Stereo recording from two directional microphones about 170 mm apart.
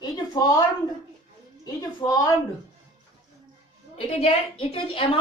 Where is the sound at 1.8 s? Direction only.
20° left (ahead or behind).